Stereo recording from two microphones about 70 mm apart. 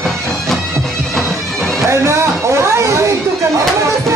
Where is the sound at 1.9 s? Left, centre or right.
Right.